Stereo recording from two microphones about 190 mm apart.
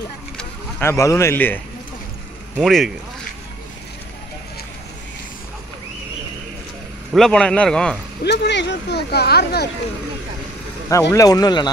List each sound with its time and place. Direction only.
0.4 s speech: 10° left (ahead or behind)
2.5 s speech: centre (ahead or behind)
7.2 s speech: 5° left (ahead or behind)
8.2 s speech: 65° left (ahead or behind)
10.9 s speech: 15° left (ahead or behind)